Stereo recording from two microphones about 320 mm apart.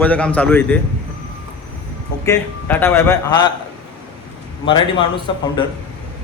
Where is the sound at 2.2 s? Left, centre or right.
Centre.